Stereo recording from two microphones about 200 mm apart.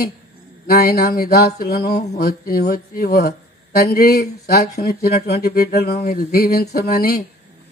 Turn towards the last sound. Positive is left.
turn(degrees=50)  # may be behind; listen again after turning